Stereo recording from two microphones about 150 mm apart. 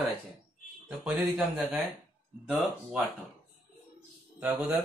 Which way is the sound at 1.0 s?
10° right (ahead or behind).